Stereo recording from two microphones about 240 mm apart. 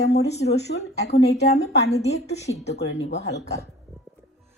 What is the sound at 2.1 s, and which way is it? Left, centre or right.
Speech, left.